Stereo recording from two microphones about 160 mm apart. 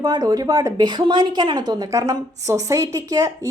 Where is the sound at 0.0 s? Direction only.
25° right (ahead or behind).